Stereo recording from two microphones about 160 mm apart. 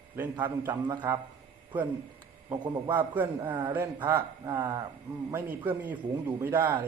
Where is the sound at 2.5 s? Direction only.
20° right (ahead or behind).